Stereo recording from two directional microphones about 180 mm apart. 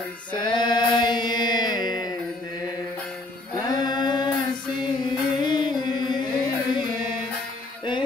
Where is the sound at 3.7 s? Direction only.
25° left (ahead or behind).